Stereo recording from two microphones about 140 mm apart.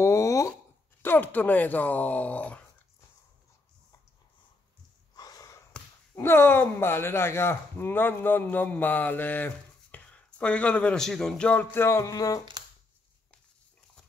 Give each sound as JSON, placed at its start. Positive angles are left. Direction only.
{"t": 0.0, "sound": "a sound", "side_deg": 20}
{"t": 1.0, "sound": "speech", "side_deg": 15}
{"t": 5.1, "sound": "snort", "side_deg": 25}
{"t": 5.7, "sound": "speech", "side_deg": 15}